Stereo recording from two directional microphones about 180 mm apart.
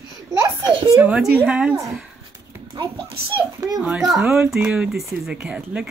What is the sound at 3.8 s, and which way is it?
Speech, centre (ahead or behind).